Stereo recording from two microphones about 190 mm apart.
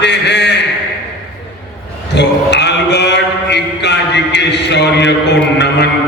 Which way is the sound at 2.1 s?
65° left (ahead or behind).